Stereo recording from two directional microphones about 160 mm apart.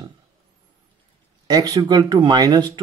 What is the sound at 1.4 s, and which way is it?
Speech, 25° right (ahead or behind).